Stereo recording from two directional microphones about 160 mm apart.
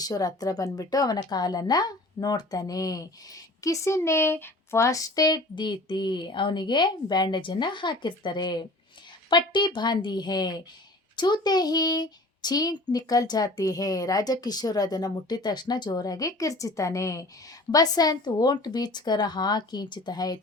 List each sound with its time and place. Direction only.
0.0 s a woman's voice: 25° left (ahead or behind)